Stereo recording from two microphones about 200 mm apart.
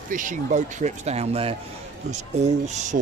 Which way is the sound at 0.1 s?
40° right (ahead or behind).